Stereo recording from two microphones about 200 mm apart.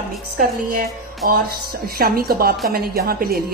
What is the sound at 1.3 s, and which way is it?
A woman's voice, 45° right (ahead or behind).